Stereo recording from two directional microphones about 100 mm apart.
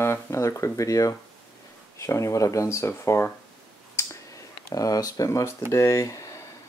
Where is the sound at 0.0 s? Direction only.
30° left (ahead or behind).